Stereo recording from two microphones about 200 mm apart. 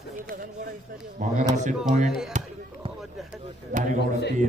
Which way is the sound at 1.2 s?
40° right (ahead or behind).